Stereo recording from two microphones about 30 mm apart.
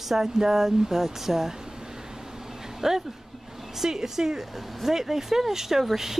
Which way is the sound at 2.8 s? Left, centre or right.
Centre.